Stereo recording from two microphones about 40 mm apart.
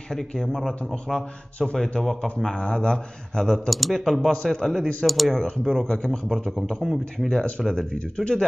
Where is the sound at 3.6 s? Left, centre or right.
Centre.